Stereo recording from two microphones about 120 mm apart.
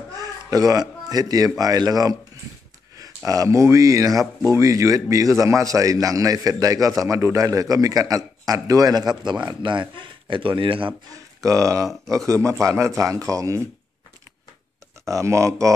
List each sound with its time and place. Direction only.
0.1 s a sound: 30° right (ahead or behind)
1.6 s speech: 30° right (ahead or behind)
3.3 s a man's voice: 25° right (ahead or behind); by 10.9 s 45° right (ahead or behind)
11.1 s a man's voice: 25° right (ahead or behind)
15.0 s a man's voice: 25° right (ahead or behind)